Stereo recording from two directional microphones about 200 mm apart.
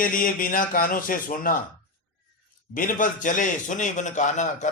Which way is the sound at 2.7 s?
40° left (ahead or behind).